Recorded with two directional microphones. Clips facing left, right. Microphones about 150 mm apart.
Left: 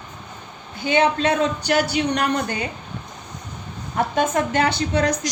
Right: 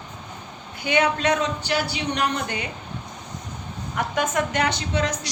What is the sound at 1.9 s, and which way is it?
Speech, 45° left (ahead or behind).